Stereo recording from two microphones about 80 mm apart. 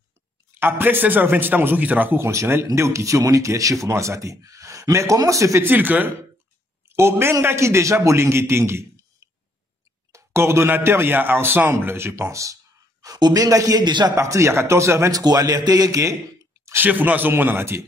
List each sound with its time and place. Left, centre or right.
0.6 s a man's voice: right
5.7 s a man's voice: right
10.1 s a man's voice: right
13.0 s a man's voice: right
14.1 s a man's voice: right
16.6 s speech: right